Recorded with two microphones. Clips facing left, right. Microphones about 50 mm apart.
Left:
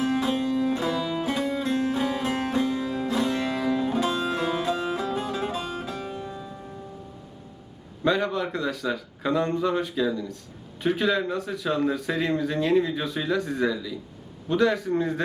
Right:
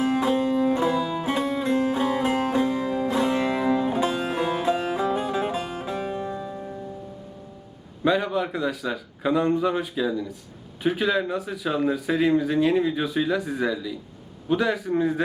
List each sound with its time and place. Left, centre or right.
0.0 s music: right
6.3 s music: centre
8.0 s speech: centre